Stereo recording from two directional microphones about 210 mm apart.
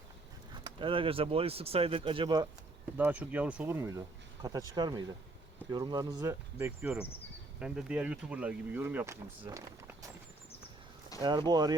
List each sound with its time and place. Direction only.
0.5 s speech: 20° right (ahead or behind)
3.0 s speech: 5° right (ahead or behind)
11.2 s speech: 20° right (ahead or behind)